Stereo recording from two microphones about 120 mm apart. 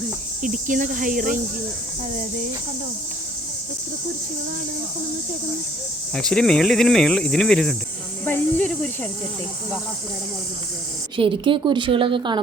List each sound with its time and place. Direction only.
0.4 s speech: 90° right
6.1 s speech: 5° left (ahead or behind)
11.2 s a woman's voice: 45° right (ahead or behind)